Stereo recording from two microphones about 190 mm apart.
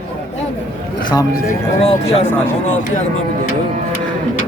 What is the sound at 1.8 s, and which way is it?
Speech, 30° left (ahead or behind).